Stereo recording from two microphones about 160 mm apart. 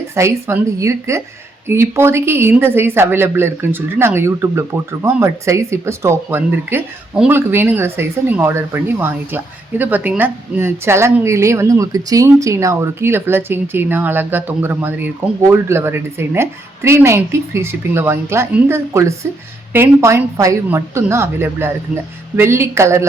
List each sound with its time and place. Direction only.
0.1 s speech: 15° right (ahead or behind)